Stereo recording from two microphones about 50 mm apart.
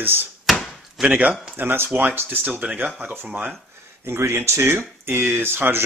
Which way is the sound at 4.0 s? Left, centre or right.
Right.